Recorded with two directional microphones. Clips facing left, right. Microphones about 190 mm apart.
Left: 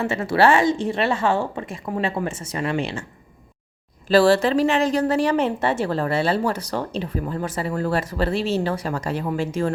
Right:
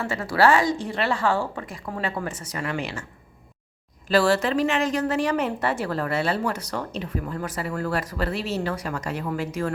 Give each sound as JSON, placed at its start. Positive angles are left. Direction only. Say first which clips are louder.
{"t": 0.0, "sound": "a woman's voice", "louder": "left 3 dB", "side_deg": 25}
{"t": 4.1, "sound": "a woman's voice", "louder": "left 4 dB", "side_deg": 30}